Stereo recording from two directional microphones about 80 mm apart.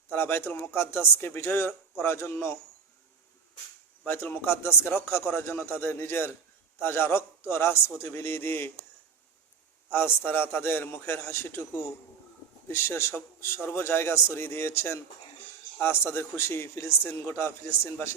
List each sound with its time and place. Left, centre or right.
0.1 s speech: left
4.0 s a man's voice: left
9.9 s speech: left
12.6 s a man's voice: left